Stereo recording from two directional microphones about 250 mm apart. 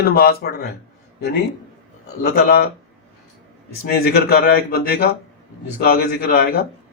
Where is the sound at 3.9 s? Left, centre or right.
Left.